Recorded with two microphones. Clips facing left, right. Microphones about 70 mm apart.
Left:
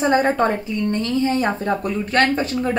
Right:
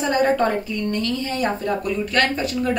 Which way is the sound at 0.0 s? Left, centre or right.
Left.